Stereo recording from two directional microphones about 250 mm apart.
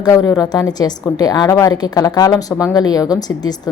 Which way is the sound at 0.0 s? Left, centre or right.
Centre.